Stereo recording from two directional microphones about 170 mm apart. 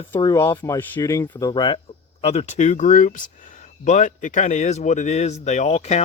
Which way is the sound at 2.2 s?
40° left (ahead or behind).